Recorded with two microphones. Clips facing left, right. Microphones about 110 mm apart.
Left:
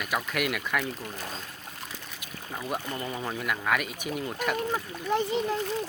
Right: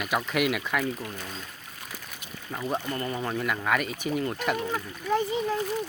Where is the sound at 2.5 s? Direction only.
Centre (ahead or behind).